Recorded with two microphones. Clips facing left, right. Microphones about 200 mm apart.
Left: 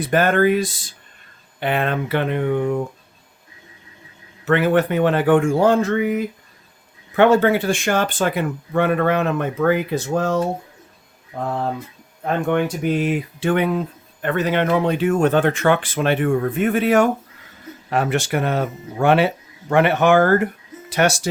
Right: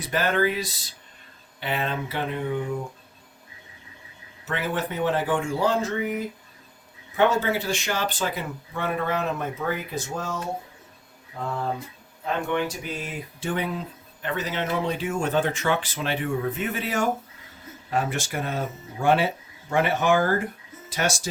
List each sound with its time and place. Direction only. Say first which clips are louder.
0.0 s speech: left 7 dB; 55° left (ahead or behind)
4.4 s speech: left 11 dB; 65° left (ahead or behind)
12.2 s speech: left 6 dB; 55° left (ahead or behind)